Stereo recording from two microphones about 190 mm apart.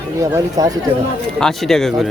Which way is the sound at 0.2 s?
20° right (ahead or behind).